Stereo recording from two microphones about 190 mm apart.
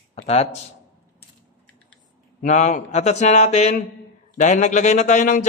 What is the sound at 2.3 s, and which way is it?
Speech, 40° left (ahead or behind).